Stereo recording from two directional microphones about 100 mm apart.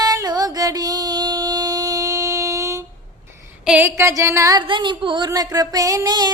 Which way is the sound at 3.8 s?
25° right (ahead or behind).